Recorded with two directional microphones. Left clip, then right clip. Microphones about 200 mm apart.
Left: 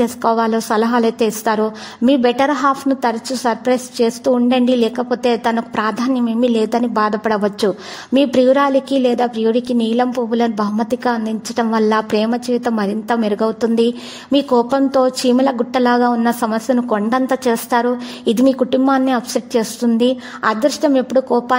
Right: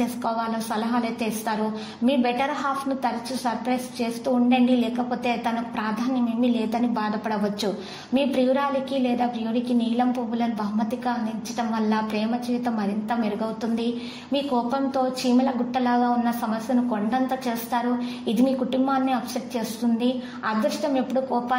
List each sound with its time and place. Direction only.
0.0 s a woman's voice: 50° left (ahead or behind)